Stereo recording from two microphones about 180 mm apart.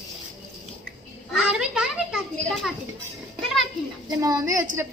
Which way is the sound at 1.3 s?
5° right (ahead or behind).